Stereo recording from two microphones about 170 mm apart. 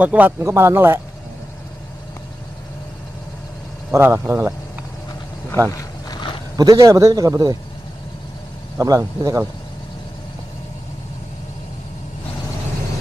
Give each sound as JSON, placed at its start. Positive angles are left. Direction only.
{"t": 0.0, "sound": "speech", "side_deg": -10}
{"t": 3.9, "sound": "speech", "side_deg": -15}
{"t": 5.7, "sound": "boat", "side_deg": 20}
{"t": 6.5, "sound": "a man's voice", "side_deg": -20}
{"t": 8.7, "sound": "a man's voice", "side_deg": -20}